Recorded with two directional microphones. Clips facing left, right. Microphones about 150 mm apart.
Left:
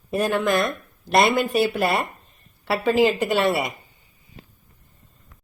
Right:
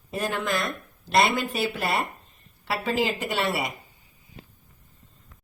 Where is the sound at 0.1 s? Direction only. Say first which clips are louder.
Left 7 dB; 55° left (ahead or behind).